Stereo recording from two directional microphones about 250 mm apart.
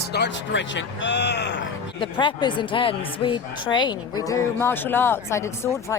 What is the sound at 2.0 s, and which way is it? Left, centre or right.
A woman's voice, centre.